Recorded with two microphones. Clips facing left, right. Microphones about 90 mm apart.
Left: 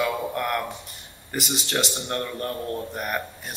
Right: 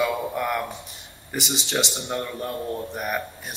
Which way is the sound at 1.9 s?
15° right (ahead or behind).